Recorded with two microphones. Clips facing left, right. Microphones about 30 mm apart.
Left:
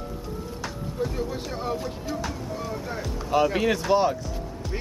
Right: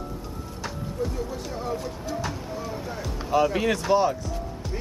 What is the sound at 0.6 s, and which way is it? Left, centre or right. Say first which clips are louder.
Music: right 1 dB; centre.